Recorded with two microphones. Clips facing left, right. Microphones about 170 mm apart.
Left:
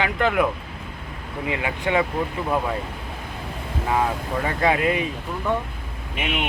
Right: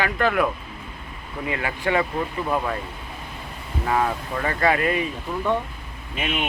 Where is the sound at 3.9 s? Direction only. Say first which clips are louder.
Even; 10° left (ahead or behind).